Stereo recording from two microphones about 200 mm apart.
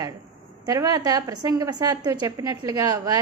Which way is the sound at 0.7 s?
15° right (ahead or behind).